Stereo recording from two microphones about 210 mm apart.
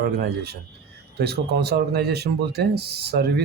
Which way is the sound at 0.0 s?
50° right (ahead or behind).